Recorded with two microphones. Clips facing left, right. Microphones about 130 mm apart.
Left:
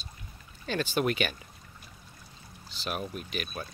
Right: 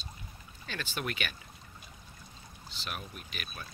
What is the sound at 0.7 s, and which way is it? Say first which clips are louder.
Speech: left 9 dB; 35° left (ahead or behind).